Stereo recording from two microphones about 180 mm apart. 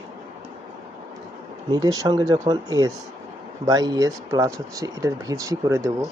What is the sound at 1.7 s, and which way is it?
Speech, 20° right (ahead or behind).